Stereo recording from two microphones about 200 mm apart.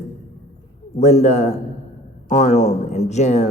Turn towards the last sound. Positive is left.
turn(degrees=35)  # may be behind; listen again after turning